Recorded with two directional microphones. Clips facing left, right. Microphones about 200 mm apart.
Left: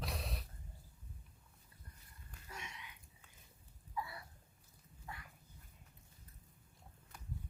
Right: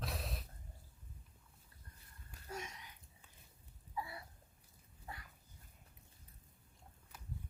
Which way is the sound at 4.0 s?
25° right (ahead or behind).